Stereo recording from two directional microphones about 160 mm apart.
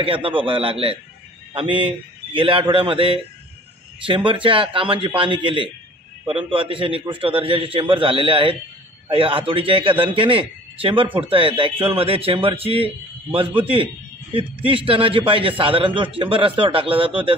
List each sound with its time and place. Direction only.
0.0 s a man's voice: 35° right (ahead or behind)